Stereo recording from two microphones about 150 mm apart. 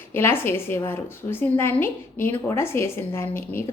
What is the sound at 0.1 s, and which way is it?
A woman's voice, 15° left (ahead or behind).